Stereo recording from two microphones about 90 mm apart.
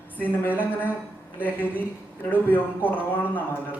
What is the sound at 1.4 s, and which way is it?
A man's voice, 20° left (ahead or behind).